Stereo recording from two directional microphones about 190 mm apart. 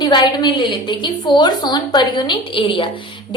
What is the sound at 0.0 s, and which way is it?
A woman's voice, 20° left (ahead or behind).